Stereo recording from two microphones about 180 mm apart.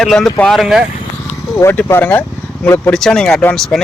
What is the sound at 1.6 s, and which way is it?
Speech, 15° left (ahead or behind).